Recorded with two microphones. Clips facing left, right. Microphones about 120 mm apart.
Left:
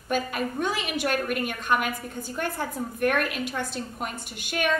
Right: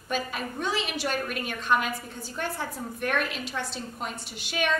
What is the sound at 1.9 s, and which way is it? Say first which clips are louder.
Speech: left 2 dB; 55° left (ahead or behind).